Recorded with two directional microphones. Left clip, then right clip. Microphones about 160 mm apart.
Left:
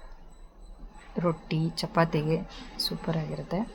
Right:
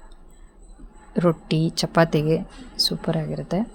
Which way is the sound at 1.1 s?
30° right (ahead or behind).